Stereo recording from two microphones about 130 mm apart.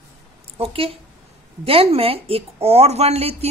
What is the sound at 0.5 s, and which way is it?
A woman's voice, 50° right (ahead or behind).